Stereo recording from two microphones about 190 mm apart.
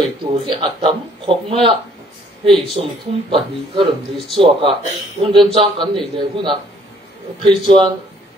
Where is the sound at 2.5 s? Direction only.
Centre (ahead or behind).